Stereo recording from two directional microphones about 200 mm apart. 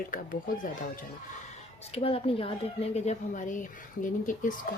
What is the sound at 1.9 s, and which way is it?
Speech, 25° left (ahead or behind).